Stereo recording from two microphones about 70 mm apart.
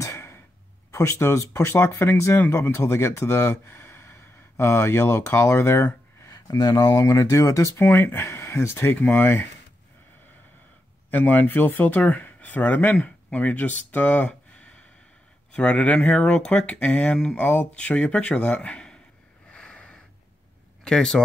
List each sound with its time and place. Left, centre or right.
0.0 s cough: left
0.9 s speech: left
6.2 s speech: left
7.8 s speech: left
8.9 s speech: left
11.1 s speech: left
19.5 s snort: centre
20.8 s speech: centre